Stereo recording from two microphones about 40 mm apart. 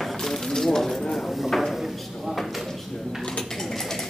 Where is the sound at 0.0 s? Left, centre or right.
Centre.